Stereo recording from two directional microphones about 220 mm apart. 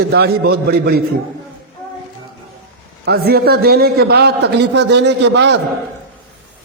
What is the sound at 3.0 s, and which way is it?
A man's voice, 45° right (ahead or behind).